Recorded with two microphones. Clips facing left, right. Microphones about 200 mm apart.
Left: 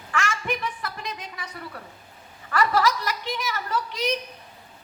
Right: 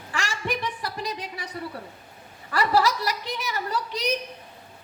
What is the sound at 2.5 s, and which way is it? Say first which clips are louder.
A woman's voice: even; 35° right (ahead or behind).